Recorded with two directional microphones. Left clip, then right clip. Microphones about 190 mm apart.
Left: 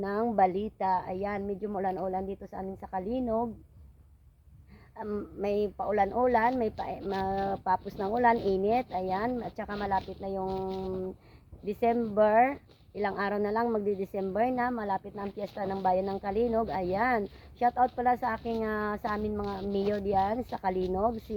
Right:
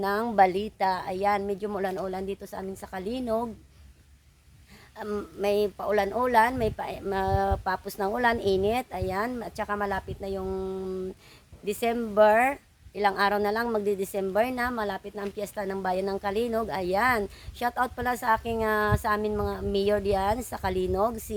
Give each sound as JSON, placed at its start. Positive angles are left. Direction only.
{"t": 0.0, "sound": "speech", "side_deg": -20}
{"t": 4.9, "sound": "speech", "side_deg": -20}
{"t": 11.6, "sound": "speech", "side_deg": -20}